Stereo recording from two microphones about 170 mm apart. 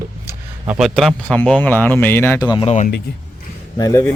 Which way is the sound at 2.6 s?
45° left (ahead or behind).